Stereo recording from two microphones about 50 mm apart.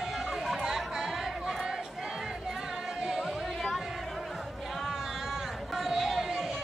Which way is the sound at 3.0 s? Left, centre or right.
Centre.